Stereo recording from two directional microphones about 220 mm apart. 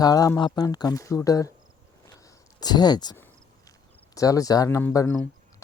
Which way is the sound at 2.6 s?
20° left (ahead or behind).